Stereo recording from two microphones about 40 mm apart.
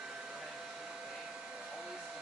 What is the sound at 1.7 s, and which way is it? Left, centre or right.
Hair dryer, centre.